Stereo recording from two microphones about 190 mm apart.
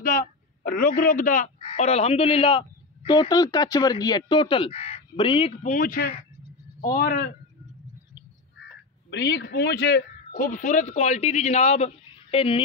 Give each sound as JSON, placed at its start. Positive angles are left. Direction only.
{"t": 0.0, "sound": "speech", "side_deg": 50}
{"t": 1.6, "sound": "speech", "side_deg": 30}
{"t": 5.6, "sound": "speech", "side_deg": 45}
{"t": 9.1, "sound": "a man's voice", "side_deg": 65}